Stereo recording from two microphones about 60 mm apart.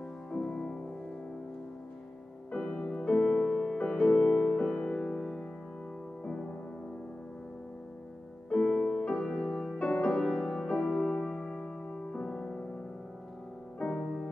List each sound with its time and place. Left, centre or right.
0.3 s music: centre
2.5 s music: centre
8.5 s music: centre
10.2 s music: centre
13.7 s music: centre